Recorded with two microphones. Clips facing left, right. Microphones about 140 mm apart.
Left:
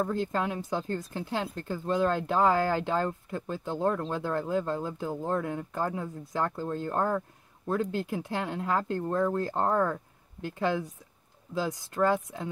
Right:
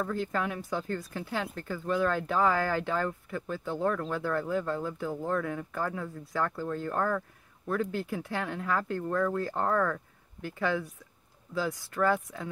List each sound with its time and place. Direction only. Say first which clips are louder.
0.0 s speech: left 2 dB; 25° left (ahead or behind)